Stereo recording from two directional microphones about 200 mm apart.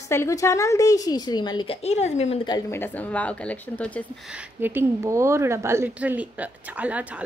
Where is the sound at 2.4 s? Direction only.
15° left (ahead or behind).